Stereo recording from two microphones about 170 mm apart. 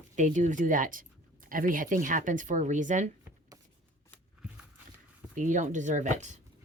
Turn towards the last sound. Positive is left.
turn(degrees=-45)  # may be behind; listen again after turning